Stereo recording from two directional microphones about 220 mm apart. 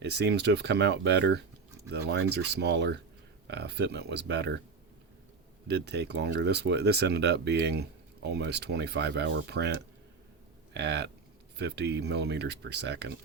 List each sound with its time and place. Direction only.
0.0 s speech: 50° right (ahead or behind)
5.6 s speech: 50° right (ahead or behind)